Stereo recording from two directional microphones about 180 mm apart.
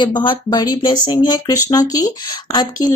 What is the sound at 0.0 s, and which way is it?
Speech, 25° left (ahead or behind).